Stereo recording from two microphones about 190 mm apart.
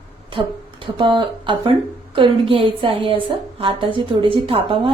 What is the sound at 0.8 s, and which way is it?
A woman's voice, 25° right (ahead or behind).